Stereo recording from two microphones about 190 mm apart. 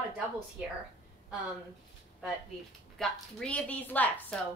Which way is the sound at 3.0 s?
5° left (ahead or behind).